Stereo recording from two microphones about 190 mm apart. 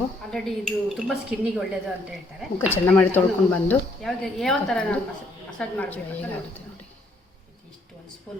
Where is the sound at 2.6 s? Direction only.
10° left (ahead or behind).